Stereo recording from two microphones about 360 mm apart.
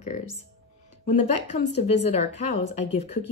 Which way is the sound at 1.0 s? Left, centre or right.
Centre.